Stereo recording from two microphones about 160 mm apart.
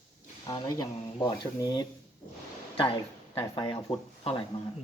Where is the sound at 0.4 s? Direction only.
25° left (ahead or behind).